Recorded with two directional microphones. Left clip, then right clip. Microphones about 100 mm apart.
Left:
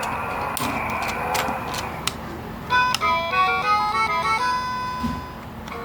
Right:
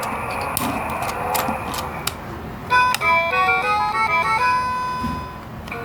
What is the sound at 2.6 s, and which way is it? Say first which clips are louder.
Music: right 3 dB; 15° right (ahead or behind).